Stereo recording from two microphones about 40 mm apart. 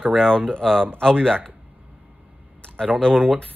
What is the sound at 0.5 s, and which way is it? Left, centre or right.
Speech, centre.